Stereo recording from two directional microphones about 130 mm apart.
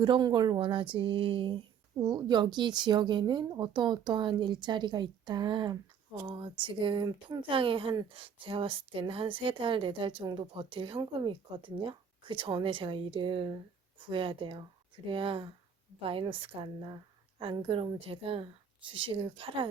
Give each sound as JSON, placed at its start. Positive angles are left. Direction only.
{"t": 0.0, "sound": "a woman's voice", "side_deg": -35}